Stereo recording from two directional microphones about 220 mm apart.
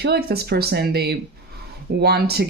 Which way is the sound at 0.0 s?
45° right (ahead or behind).